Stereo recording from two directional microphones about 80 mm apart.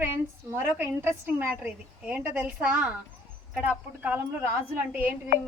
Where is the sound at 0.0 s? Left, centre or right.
Right.